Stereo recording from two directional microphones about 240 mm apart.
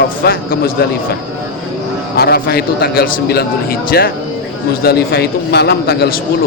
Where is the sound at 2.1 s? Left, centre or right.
Left.